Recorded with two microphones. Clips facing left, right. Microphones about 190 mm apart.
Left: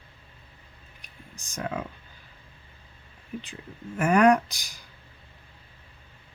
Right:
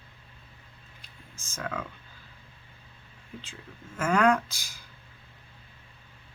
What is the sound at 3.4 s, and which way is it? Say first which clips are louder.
Speech: left 5 dB; 15° left (ahead or behind).